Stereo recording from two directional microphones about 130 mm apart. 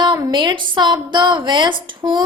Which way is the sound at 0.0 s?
35° right (ahead or behind).